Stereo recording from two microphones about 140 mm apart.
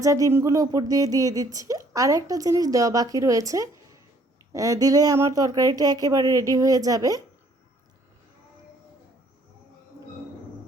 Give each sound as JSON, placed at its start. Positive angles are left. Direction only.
{"t": 0.0, "sound": "speech", "side_deg": -25}